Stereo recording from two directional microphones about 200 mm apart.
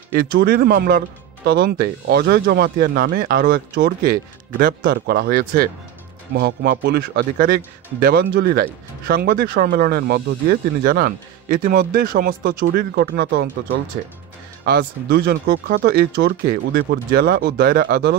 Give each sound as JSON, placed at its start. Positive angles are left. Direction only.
{"t": 0.1, "sound": "speech", "side_deg": -50}
{"t": 14.6, "sound": "speech", "side_deg": -50}